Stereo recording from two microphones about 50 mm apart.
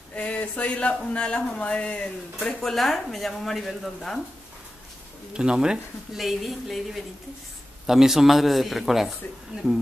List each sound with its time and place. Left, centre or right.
0.1 s speech: left
2.6 s speech: centre
5.3 s speech: centre
6.1 s speech: centre